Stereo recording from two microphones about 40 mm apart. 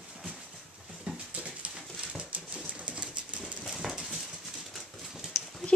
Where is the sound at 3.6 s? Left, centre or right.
Centre.